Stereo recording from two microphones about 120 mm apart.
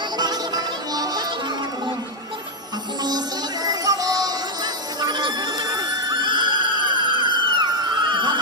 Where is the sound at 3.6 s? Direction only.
30° right (ahead or behind).